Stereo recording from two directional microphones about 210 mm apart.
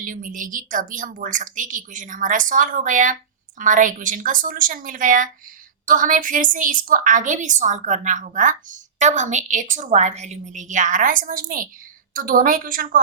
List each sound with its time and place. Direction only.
0.0 s a woman's voice: 40° right (ahead or behind)